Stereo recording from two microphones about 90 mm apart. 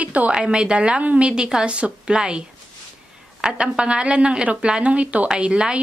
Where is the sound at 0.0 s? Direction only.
15° right (ahead or behind).